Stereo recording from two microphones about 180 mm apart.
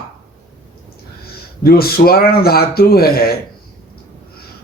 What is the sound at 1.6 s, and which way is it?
Speech, 60° left (ahead or behind).